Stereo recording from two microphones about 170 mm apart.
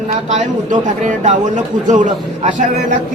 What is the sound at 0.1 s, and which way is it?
A man's voice, 45° right (ahead or behind).